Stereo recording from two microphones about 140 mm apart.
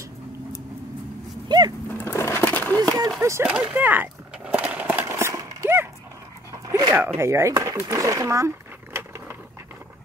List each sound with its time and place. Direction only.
1.9 s skateboard: 15° left (ahead or behind)
3.2 s speech: 20° right (ahead or behind)
3.4 s a sound: 10° right (ahead or behind)
6.7 s zipper: 25° right (ahead or behind)
7.2 s speech: 20° right (ahead or behind)